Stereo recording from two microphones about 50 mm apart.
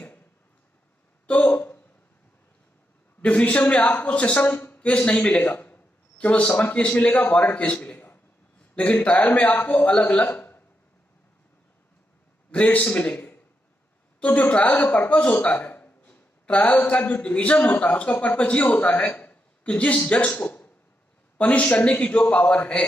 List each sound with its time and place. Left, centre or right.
1.2 s a sound: left
3.2 s a man's voice: left
4.7 s a man's voice: left
5.4 s a man's voice: left
12.4 s a man's voice: left
20.4 s a sound: left
21.4 s a man's voice: left